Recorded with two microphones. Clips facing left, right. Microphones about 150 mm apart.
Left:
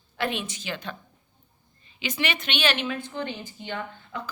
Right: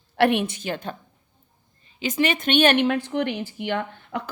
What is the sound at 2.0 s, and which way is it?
A woman's voice, 45° right (ahead or behind).